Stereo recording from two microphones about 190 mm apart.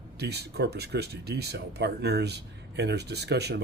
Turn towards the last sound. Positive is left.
turn(degrees=-60)  # may be behind; listen again after turning